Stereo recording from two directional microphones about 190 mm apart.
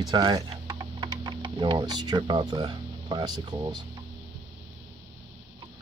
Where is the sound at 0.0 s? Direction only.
20° right (ahead or behind).